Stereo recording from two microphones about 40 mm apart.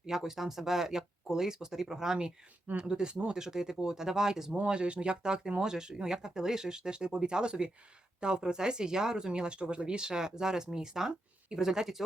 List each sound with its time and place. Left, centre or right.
0.0 s speech: centre
4.5 s speech: right; by 12.0 s centre